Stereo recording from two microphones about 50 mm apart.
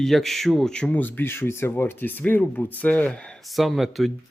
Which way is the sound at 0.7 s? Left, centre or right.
Left.